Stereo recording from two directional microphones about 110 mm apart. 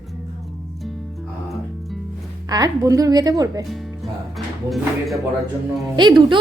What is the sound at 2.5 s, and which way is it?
A woman's voice, 35° right (ahead or behind).